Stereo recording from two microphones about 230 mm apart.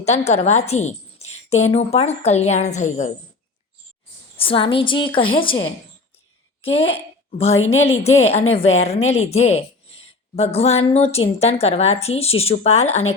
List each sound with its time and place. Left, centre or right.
0.0 s a woman's voice: left
4.4 s a woman's voice: left